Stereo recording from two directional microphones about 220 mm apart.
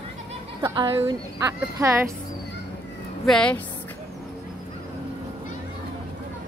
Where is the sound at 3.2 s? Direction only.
5° left (ahead or behind).